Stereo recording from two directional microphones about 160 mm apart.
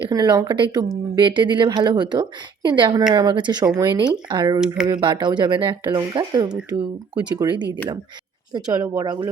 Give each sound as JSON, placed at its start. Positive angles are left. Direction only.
{"t": 0.0, "sound": "speech", "side_deg": -25}
{"t": 8.5, "sound": "speech", "side_deg": -25}